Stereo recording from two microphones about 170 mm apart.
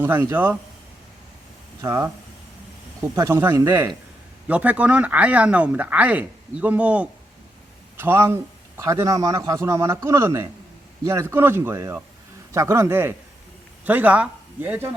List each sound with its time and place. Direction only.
0.0 s speech: 10° right (ahead or behind)
1.8 s speech: 20° right (ahead or behind)